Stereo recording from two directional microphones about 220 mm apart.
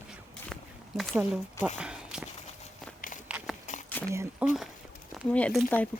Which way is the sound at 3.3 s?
5° right (ahead or behind).